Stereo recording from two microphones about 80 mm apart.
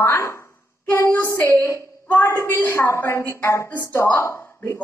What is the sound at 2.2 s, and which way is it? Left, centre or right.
A woman's voice, left.